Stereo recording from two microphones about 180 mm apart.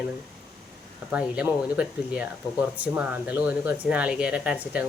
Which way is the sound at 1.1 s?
5° right (ahead or behind).